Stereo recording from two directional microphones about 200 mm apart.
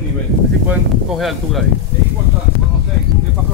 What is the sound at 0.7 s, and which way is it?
Speech, centre (ahead or behind).